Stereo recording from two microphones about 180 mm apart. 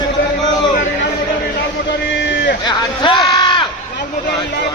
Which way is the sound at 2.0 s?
80° left.